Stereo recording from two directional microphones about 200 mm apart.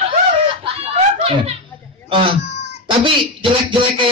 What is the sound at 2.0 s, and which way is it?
Speech, 25° right (ahead or behind).